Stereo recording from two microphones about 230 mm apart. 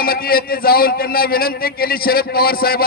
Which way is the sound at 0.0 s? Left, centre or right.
Left.